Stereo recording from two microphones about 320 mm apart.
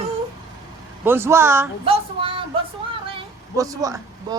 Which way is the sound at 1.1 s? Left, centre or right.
Centre.